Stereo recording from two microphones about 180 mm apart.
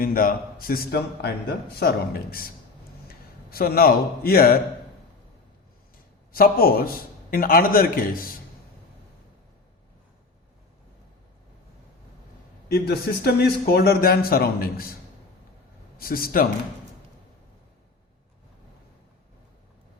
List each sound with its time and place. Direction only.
0.0 s a man's voice: 50° left (ahead or behind)
6.3 s a man's voice: 55° left (ahead or behind)
12.6 s a man's voice: 60° left (ahead or behind)
16.0 s a man's voice: 55° left (ahead or behind)